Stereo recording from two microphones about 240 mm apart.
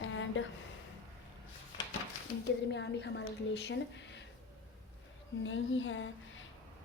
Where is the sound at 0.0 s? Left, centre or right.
Left.